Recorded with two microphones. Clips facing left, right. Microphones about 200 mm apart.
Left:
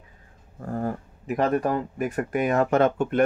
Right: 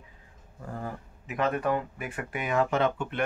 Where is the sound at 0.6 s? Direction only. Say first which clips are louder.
Left 8 dB; 45° left (ahead or behind).